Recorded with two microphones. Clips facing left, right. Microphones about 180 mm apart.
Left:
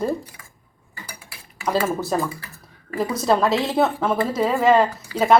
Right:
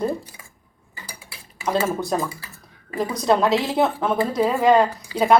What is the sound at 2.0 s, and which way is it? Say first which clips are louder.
Speech: left 1 dB; centre (ahead or behind).